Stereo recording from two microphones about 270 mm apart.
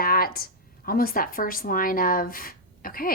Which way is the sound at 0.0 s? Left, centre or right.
Left.